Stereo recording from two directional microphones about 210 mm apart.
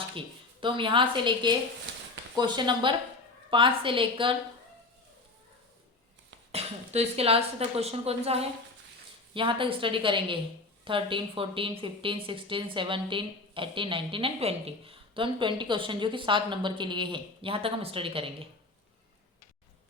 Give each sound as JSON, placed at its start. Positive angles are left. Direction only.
{"t": 0.6, "sound": "a woman's voice", "side_deg": -25}
{"t": 6.5, "sound": "a woman's voice", "side_deg": -30}